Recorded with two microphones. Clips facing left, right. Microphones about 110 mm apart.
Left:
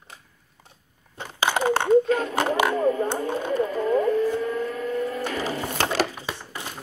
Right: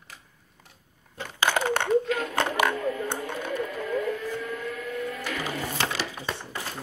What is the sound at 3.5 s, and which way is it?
Vehicle, 35° left (ahead or behind).